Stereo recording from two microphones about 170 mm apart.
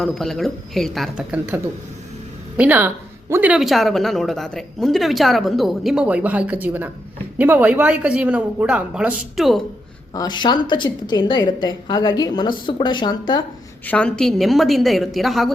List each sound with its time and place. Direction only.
0.0 s speech: centre (ahead or behind)
2.6 s speech: 10° right (ahead or behind)
10.2 s a woman's voice: 25° left (ahead or behind)
13.8 s speech: 5° left (ahead or behind)